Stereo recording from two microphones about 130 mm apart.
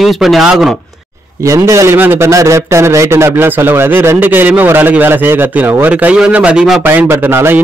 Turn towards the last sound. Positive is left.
turn(degrees=-15)  # may be behind; listen again after turning